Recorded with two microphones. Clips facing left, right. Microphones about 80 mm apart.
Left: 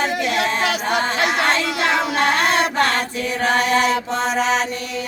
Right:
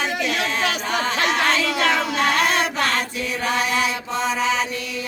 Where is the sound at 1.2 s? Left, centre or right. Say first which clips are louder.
Left 1 dB; centre.